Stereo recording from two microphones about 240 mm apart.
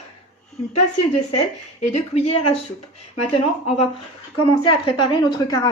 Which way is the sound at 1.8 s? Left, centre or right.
Left.